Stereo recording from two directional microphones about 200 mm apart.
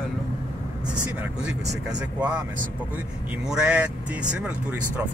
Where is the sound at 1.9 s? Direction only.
5° right (ahead or behind).